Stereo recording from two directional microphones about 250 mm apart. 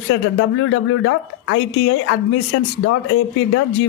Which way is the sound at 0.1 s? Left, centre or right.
Left.